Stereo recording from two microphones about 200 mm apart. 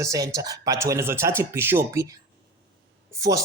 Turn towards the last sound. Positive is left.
turn(degrees=-15)  # may be behind; listen again after turning